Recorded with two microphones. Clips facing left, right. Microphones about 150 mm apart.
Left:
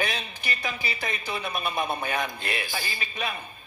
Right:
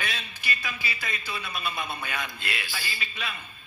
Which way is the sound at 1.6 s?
45° left (ahead or behind).